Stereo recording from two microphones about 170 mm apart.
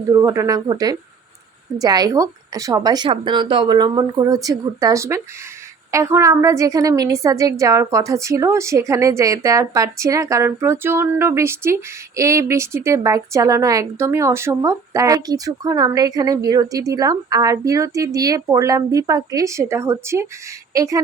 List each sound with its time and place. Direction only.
0.1 s a woman's voice: 20° right (ahead or behind)